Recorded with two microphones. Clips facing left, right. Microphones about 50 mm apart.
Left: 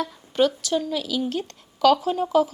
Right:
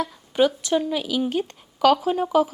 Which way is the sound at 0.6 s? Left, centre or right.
Right.